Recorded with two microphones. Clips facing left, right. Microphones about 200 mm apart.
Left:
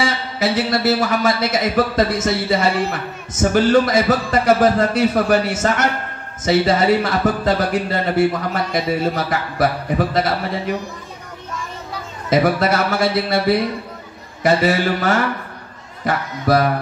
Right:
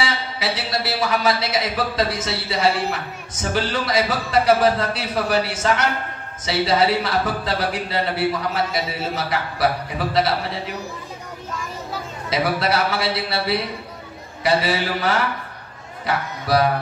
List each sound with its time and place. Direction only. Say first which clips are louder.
0.0 s speech: left 5 dB; 45° left (ahead or behind)
12.3 s speech: left 5 dB; 50° left (ahead or behind)